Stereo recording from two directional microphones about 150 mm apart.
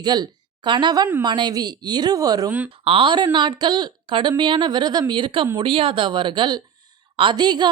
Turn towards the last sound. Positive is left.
turn(degrees=-30)  # may be behind; listen again after turning